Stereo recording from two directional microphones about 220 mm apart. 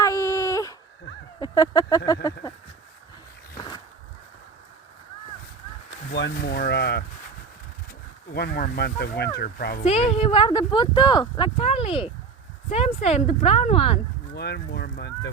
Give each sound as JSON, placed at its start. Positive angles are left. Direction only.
{"t": 0.0, "sound": "baby cry", "side_deg": 15}
{"t": 1.4, "sound": "speech", "side_deg": 20}
{"t": 6.1, "sound": "speech", "side_deg": 50}
{"t": 8.3, "sound": "speech", "side_deg": 45}
{"t": 9.8, "sound": "speech", "side_deg": 25}
{"t": 14.3, "sound": "speech", "side_deg": 50}